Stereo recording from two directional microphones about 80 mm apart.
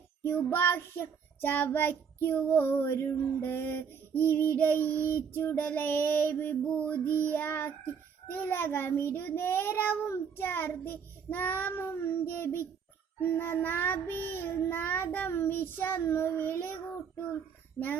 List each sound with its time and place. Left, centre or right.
0.2 s child singing: left
17.8 s speech: centre